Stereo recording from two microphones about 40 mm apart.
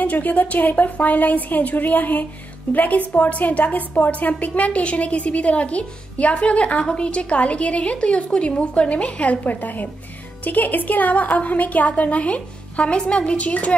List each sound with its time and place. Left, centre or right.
0.0 s a woman's voice: left
13.4 s a woman's voice: left